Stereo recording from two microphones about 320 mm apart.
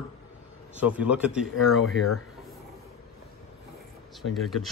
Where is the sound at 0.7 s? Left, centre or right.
Centre.